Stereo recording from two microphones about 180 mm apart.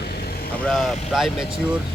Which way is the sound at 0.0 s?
60° left (ahead or behind).